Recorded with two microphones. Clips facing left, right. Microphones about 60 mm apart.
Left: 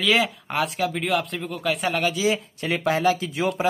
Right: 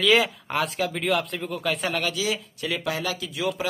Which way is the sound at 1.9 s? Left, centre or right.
Left.